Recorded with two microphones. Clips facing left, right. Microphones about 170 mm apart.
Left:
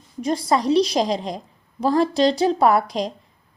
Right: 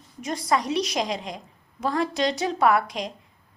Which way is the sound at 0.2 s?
30° left (ahead or behind).